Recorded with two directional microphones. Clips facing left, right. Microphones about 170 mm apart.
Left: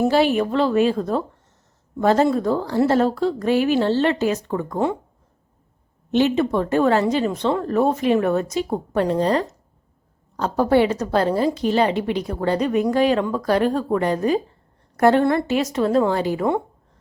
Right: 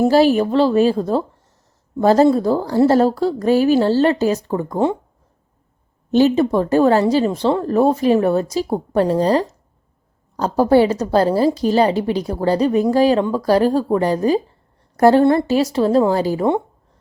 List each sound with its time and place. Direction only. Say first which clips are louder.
0.0 s a woman's voice: right 4 dB; 35° right (ahead or behind)
6.1 s a woman's voice: right 4 dB; 35° right (ahead or behind)